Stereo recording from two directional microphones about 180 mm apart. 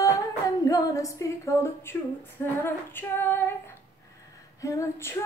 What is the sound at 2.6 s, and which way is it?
Female singing, 10° left (ahead or behind).